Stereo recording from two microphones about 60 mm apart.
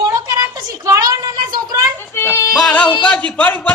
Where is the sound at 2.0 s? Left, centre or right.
Left.